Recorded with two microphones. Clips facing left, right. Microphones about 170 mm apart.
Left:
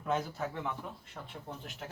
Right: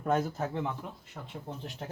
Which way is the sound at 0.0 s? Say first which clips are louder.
Right 4 dB; 40° right (ahead or behind).